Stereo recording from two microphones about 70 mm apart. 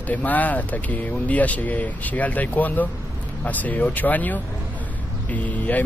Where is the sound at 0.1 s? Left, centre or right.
Left.